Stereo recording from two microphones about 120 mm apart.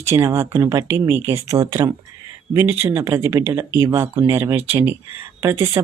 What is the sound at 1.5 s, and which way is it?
Speech, 30° right (ahead or behind).